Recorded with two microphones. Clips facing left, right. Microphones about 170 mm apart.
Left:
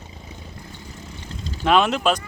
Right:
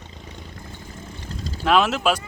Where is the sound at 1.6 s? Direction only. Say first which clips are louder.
Left 1 dB; centre (ahead or behind).